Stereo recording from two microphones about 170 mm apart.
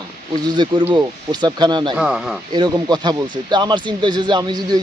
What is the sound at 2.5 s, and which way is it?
Speech, 25° right (ahead or behind).